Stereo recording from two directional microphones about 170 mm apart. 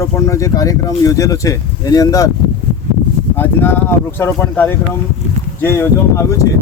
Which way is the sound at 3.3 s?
15° left (ahead or behind).